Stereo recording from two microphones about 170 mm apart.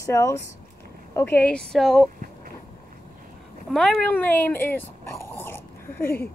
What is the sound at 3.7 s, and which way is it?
Speech, 5° left (ahead or behind).